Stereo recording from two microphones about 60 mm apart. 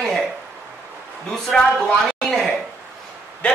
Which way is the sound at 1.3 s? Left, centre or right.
Centre.